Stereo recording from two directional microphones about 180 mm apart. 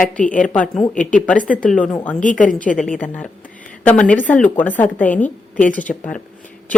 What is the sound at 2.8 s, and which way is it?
A woman's voice, 5° left (ahead or behind).